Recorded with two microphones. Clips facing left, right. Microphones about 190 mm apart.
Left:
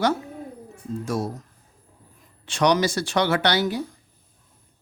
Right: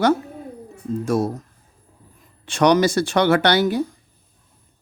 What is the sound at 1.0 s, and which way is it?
Speech, 55° right (ahead or behind).